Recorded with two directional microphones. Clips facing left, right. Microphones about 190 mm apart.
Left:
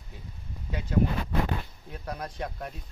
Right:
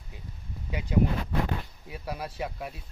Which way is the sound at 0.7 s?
10° right (ahead or behind).